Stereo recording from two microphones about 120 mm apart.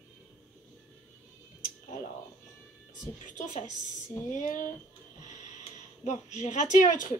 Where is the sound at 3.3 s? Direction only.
90° left.